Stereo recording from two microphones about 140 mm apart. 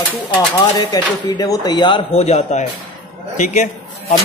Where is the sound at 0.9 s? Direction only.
25° left (ahead or behind).